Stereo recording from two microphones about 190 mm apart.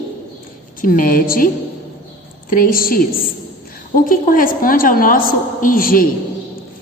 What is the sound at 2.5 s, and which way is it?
A woman's voice, 50° left (ahead or behind).